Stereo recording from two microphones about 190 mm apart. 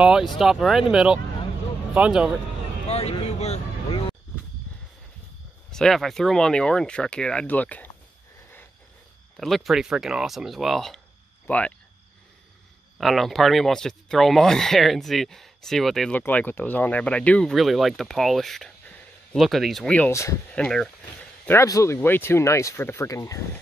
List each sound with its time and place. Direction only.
0.0 s speech: 5° right (ahead or behind)
2.9 s a sound: 35° left (ahead or behind)
5.7 s speech: 5° left (ahead or behind)
9.4 s speech: centre (ahead or behind)
12.9 s speech: centre (ahead or behind)
20.5 s speech: 5° left (ahead or behind)